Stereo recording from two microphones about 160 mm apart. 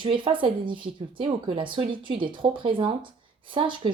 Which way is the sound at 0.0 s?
30° right (ahead or behind).